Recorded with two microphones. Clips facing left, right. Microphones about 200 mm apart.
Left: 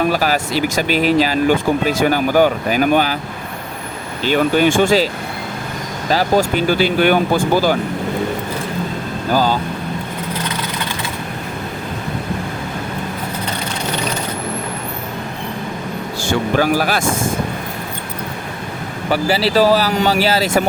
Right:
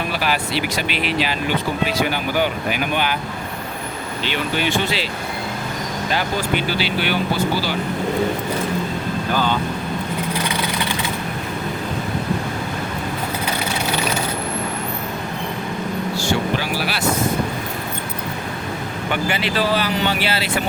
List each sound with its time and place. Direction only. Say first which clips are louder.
0.1 s speech: left 5 dB; 40° left (ahead or behind)
4.2 s speech: left 10 dB; 45° left (ahead or behind)
6.1 s speech: left 8 dB; 40° left (ahead or behind)
9.3 s speech: left 5 dB; 40° left (ahead or behind)
16.2 s speech: left 8 dB; 50° left (ahead or behind)
19.1 s speech: left 7 dB; 35° left (ahead or behind)